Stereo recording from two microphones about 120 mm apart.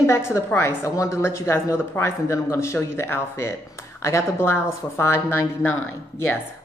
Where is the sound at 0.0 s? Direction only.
25° left (ahead or behind).